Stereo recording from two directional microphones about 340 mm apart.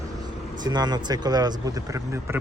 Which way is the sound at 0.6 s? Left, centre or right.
Centre.